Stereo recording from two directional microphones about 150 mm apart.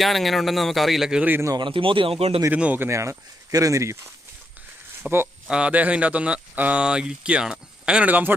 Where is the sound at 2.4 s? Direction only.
10° right (ahead or behind).